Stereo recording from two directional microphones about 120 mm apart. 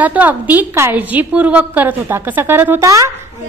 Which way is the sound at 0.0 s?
15° right (ahead or behind).